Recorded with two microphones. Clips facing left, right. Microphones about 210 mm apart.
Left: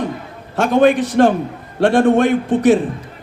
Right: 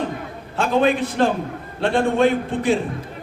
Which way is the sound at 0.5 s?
75° left (ahead or behind).